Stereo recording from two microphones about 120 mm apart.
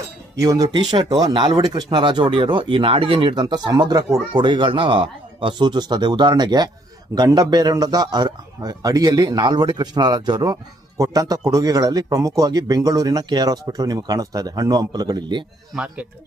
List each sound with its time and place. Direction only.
0.3 s a man's voice: 30° right (ahead or behind); by 3.4 s 45° right (ahead or behind)
3.4 s a man's voice: 35° right (ahead or behind)
15.7 s speech: 10° right (ahead or behind)